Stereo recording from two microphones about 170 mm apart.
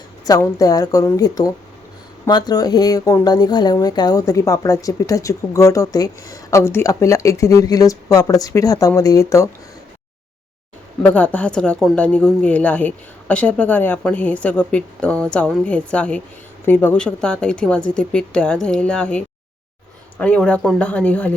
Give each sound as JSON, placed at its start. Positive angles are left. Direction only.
{"t": 0.3, "sound": "speech", "side_deg": 20}
{"t": 11.0, "sound": "speech", "side_deg": 10}